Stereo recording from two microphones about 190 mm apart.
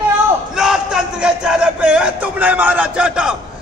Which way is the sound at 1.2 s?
5° right (ahead or behind).